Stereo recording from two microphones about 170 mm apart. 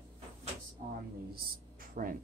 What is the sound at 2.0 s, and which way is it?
Speech, 50° right (ahead or behind).